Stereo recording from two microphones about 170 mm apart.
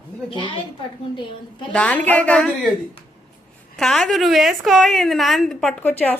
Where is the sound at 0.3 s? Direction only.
30° left (ahead or behind).